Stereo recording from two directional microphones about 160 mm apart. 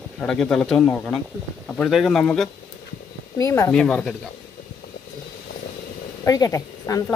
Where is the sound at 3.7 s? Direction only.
5° left (ahead or behind).